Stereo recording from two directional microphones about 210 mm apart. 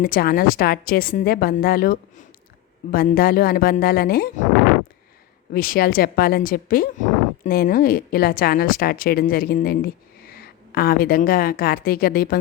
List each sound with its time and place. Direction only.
0.0 s speech: 45° left (ahead or behind)
5.5 s speech: 45° left (ahead or behind)